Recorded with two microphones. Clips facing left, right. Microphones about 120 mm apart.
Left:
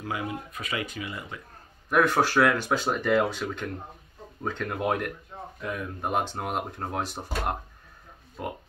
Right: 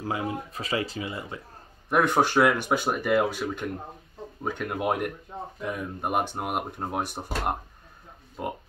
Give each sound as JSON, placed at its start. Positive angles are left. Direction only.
{"t": 0.0, "sound": "speech", "side_deg": -30}